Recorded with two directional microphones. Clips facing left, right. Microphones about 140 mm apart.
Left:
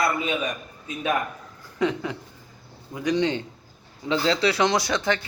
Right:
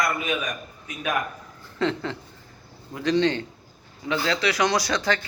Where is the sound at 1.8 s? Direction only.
15° left (ahead or behind).